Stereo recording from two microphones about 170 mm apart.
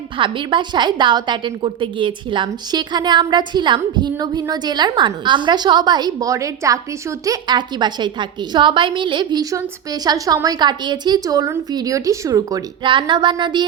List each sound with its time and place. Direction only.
0.2 s a woman's voice: 30° right (ahead or behind)